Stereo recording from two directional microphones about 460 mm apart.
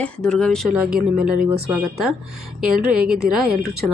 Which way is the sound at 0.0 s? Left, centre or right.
Centre.